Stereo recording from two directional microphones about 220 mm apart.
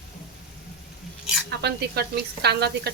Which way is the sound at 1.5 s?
50° right (ahead or behind).